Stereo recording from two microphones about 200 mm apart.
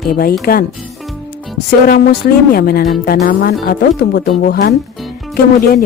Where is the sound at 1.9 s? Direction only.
50° left (ahead or behind).